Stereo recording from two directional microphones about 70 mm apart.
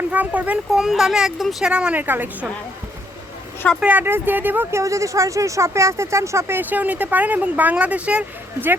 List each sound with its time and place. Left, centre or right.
0.1 s speech: right
0.7 s speech: centre
1.6 s speech: centre
3.8 s speech: right
4.7 s speech: right
6.6 s speech: right